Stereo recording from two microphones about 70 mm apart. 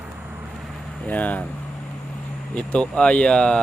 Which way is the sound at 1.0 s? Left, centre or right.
Left.